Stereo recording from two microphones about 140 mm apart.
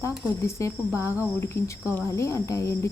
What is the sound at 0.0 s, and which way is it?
A woman's voice, 20° left (ahead or behind).